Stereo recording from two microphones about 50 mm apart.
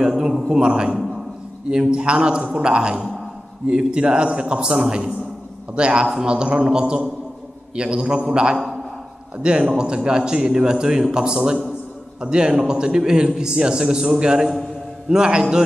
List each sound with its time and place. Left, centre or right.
0.0 s a man's voice: centre